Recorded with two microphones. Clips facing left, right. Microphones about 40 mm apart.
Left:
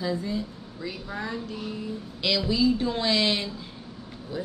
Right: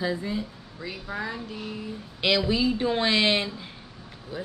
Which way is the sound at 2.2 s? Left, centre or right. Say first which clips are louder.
Even; right.